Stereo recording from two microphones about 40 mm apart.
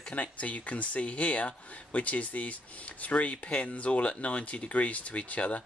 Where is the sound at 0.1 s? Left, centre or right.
Left.